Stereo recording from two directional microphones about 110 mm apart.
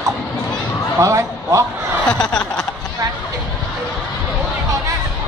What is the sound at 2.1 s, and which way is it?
Snicker, 5° left (ahead or behind).